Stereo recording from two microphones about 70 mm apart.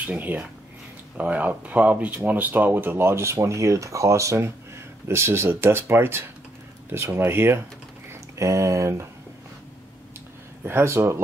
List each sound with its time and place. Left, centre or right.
0.0 s speech: right
8.1 s speech: right
10.6 s speech: right